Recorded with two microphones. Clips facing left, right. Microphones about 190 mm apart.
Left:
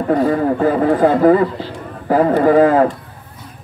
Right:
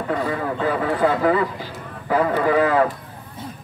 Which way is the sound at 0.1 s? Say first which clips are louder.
Left 9 dB; 40° left (ahead or behind).